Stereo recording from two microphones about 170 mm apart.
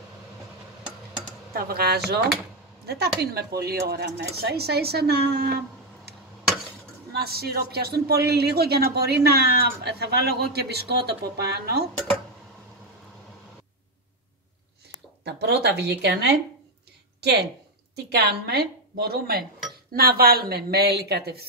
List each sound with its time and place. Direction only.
1.5 s speech: 60° right (ahead or behind)
7.1 s speech: 65° right (ahead or behind)
15.2 s a woman's voice: 85° right